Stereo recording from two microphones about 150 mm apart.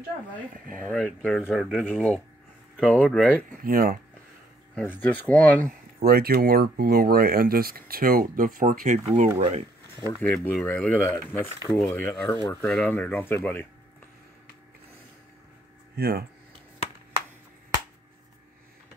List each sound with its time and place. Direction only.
0.7 s speech: 5° left (ahead or behind)
3.6 s speech: 75° right (ahead or behind)
4.7 s speech: 10° left (ahead or behind)
6.0 s speech: 90° right; by 9.3 s 60° right (ahead or behind)
9.4 s speech: 45° right (ahead or behind)
10.2 s speech: 10° left (ahead or behind)
12.6 s speech: 5° left (ahead or behind)
16.0 s speech: 90° right